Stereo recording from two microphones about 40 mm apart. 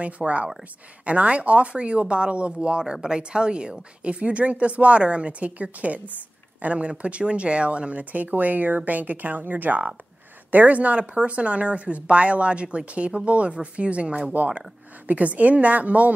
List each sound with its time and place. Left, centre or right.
0.0 s speech: right